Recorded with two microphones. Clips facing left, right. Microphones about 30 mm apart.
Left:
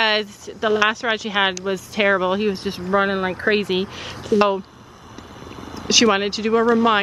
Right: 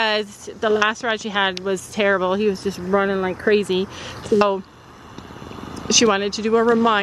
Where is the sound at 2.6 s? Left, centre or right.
Left; by 4.6 s centre.